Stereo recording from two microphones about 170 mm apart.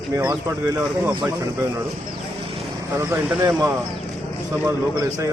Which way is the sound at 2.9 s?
15° right (ahead or behind).